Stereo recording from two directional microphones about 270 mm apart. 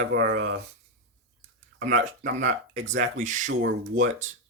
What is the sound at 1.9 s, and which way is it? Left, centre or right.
Speech, right.